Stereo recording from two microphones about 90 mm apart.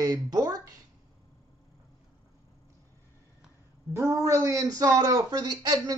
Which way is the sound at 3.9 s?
30° right (ahead or behind).